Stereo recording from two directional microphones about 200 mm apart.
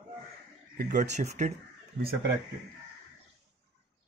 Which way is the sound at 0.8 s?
40° right (ahead or behind).